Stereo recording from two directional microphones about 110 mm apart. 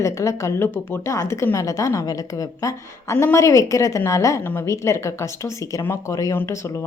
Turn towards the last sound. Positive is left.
turn(degrees=25)  # may be behind; listen again after turning